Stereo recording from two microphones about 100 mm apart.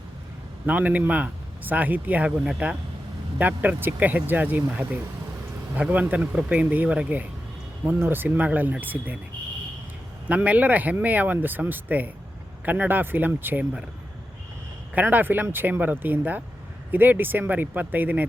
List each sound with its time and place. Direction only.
0.6 s speech: 15° right (ahead or behind)
5.7 s speech: 15° right (ahead or behind)
10.2 s speech: 15° right (ahead or behind)
14.9 s speech: 20° right (ahead or behind)